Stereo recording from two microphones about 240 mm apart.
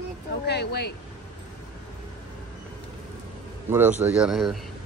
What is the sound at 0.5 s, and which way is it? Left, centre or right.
Speech, left.